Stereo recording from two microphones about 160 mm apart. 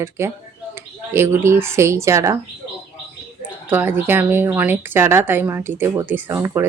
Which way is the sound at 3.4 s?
10° right (ahead or behind).